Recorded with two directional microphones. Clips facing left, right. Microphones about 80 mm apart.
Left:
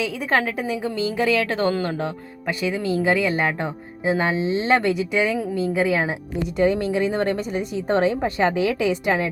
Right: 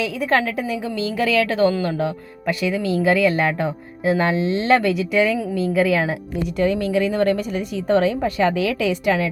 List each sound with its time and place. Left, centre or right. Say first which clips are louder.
0.3 s speech: right 1 dB; left